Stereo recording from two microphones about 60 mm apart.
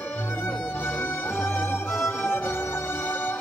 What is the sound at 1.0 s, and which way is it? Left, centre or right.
Music, left.